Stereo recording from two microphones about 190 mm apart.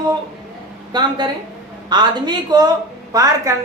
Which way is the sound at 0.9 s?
25° right (ahead or behind).